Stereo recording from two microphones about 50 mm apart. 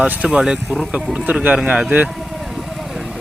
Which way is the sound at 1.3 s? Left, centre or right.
Right.